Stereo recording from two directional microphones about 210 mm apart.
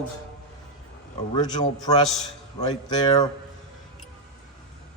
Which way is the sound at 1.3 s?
20° left (ahead or behind).